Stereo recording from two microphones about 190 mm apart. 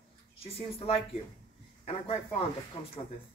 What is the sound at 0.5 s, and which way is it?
Speech, 30° left (ahead or behind).